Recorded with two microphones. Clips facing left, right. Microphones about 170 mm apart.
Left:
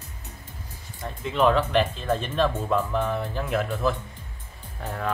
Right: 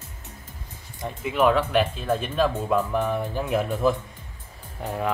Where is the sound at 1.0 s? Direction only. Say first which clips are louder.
Right 1 dB; 10° right (ahead or behind).